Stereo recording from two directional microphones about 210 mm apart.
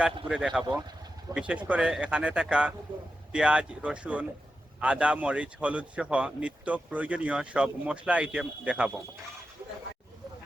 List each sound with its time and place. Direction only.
0.0 s speech: 5° right (ahead or behind)